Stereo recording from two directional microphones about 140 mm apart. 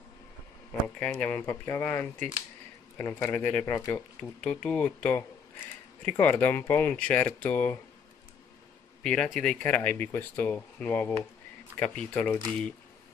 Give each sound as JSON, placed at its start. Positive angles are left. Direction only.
{"t": 0.7, "sound": "speech", "side_deg": 10}
{"t": 4.2, "sound": "speech", "side_deg": 5}
{"t": 9.0, "sound": "speech", "side_deg": 5}